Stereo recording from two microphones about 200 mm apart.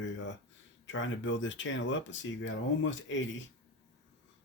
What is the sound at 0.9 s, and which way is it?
Speech, 70° left (ahead or behind).